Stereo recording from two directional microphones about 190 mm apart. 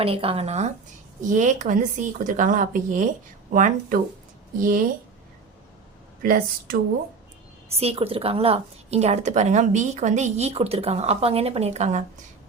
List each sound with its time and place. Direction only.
0.0 s a woman's voice: 30° right (ahead or behind)
6.2 s speech: 50° right (ahead or behind)
7.7 s a woman's voice: 30° right (ahead or behind)